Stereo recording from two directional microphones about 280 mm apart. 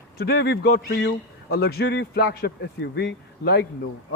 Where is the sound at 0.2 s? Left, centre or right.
Left.